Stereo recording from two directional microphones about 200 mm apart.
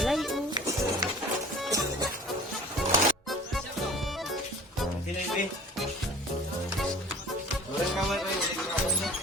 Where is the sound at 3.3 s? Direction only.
Centre (ahead or behind).